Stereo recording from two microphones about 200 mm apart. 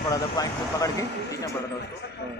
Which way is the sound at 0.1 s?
20° left (ahead or behind).